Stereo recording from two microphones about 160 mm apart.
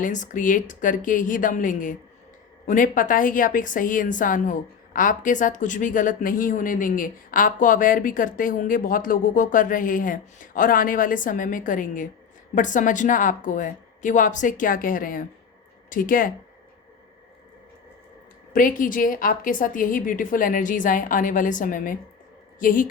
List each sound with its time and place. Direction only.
0.0 s speech: 50° left (ahead or behind)
18.5 s speech: 60° left (ahead or behind)